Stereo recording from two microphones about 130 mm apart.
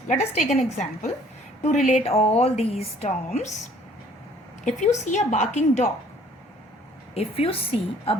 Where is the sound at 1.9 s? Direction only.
55° left (ahead or behind).